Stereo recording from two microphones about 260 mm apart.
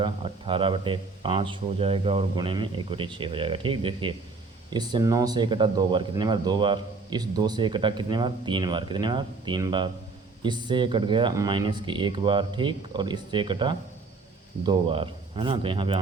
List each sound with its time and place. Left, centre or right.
0.0 s speech: centre